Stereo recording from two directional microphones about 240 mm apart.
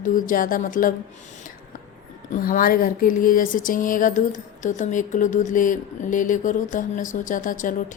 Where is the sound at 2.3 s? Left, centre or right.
Left.